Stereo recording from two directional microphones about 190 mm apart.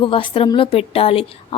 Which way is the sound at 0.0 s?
25° left (ahead or behind).